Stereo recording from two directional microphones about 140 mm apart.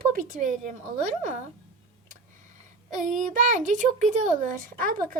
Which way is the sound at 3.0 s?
65° right (ahead or behind).